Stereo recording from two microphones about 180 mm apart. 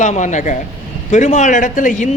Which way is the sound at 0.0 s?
40° left (ahead or behind).